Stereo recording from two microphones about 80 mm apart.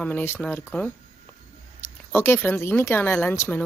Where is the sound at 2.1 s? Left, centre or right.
Left.